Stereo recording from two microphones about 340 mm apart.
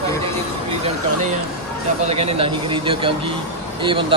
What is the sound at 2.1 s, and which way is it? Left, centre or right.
Speech, centre.